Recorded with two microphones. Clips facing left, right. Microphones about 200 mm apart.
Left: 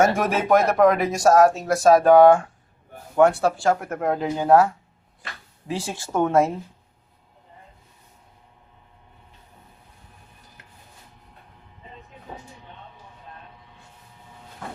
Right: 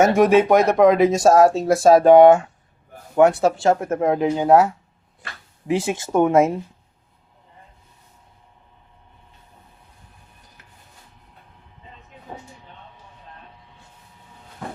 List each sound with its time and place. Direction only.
0.0 s speech: 20° right (ahead or behind)